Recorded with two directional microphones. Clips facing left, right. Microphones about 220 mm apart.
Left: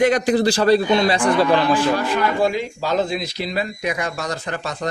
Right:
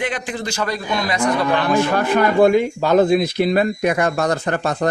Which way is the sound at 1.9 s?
55° right (ahead or behind).